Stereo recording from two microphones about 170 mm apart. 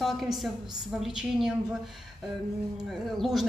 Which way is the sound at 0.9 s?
Centre (ahead or behind).